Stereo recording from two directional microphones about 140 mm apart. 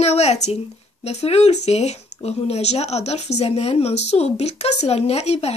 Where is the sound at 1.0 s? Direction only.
50° left (ahead or behind).